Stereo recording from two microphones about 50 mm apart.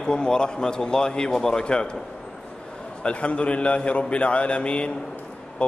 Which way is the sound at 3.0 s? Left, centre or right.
Left.